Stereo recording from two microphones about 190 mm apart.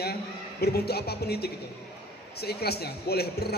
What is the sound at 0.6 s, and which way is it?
A man's voice, 55° left (ahead or behind).